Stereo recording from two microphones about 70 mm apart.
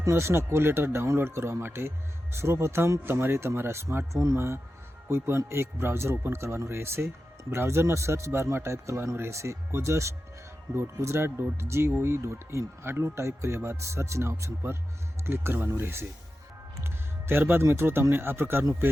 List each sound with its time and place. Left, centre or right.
0.0 s speech: right
16.7 s music: right
17.6 s speech: right